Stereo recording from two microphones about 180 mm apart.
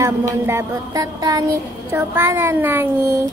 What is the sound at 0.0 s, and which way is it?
Mantra, 15° right (ahead or behind).